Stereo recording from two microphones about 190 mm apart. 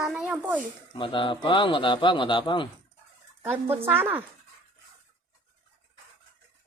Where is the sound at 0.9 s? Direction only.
25° left (ahead or behind).